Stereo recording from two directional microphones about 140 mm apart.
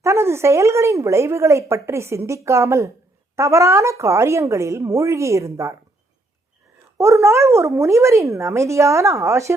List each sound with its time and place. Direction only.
0.0 s speech: 20° right (ahead or behind)
7.0 s speech: 20° right (ahead or behind)